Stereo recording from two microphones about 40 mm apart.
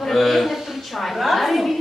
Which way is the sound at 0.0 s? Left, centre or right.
Centre.